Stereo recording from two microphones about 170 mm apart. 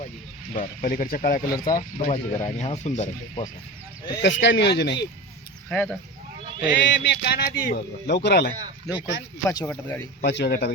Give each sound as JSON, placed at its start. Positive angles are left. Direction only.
{"t": 0.5, "sound": "speech", "side_deg": 50}
{"t": 2.1, "sound": "speech", "side_deg": 40}
{"t": 4.2, "sound": "speech", "side_deg": 90}
{"t": 5.6, "sound": "speech", "side_deg": 5}
{"t": 6.7, "sound": "speech", "side_deg": 90}
{"t": 9.0, "sound": "speech", "side_deg": 90}
{"t": 9.5, "sound": "speech", "side_deg": 15}
{"t": 10.2, "sound": "speech", "side_deg": 80}